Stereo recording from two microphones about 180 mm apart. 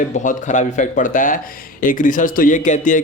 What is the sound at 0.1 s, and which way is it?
A man's voice, 45° left (ahead or behind).